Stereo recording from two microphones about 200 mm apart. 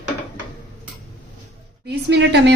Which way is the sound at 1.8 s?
60° right (ahead or behind).